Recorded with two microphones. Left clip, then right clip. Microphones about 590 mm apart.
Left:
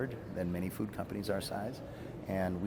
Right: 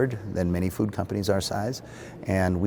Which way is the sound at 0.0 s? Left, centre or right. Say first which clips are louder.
Right 11 dB; right.